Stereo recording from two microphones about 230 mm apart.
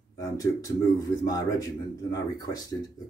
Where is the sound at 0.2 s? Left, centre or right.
Centre.